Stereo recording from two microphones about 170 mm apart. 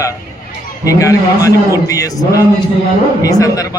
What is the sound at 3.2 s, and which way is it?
Speech, 20° left (ahead or behind).